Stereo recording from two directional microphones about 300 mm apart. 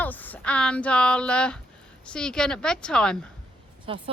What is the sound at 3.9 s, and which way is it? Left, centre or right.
Speech, centre.